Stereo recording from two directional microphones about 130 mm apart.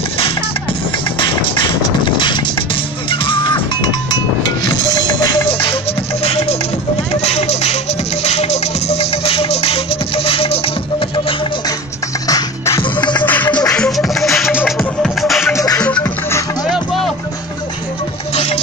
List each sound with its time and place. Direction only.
1.2 s music: 40° left (ahead or behind)
5.5 s music: 45° left (ahead or behind)
6.2 s a sound: 50° left (ahead or behind)
7.1 s music: 55° left (ahead or behind)
12.3 s music: 25° left (ahead or behind)
13.2 s music: 15° left (ahead or behind)
13.5 s music: 30° left (ahead or behind)
13.7 s music: centre (ahead or behind)
15.5 s music: 25° left (ahead or behind)
15.8 s music: 10° left (ahead or behind)
18.3 s music: 55° left (ahead or behind)